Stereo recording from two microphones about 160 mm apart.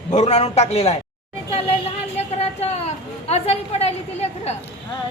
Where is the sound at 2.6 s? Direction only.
40° left (ahead or behind).